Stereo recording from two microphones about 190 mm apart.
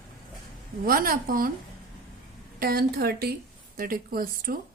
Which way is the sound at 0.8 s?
50° right (ahead or behind).